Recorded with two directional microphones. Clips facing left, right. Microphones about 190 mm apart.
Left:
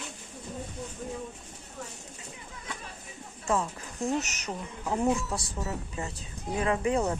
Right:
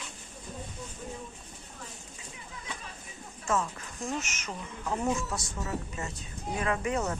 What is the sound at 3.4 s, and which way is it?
Speech, 15° left (ahead or behind).